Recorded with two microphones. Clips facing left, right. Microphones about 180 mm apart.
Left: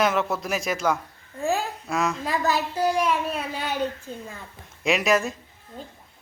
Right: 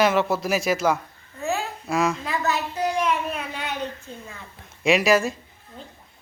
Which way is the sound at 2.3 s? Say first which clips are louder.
Left 1 dB; 35° left (ahead or behind).